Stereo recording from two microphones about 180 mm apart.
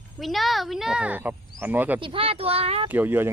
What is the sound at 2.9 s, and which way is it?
Speech, 10° right (ahead or behind).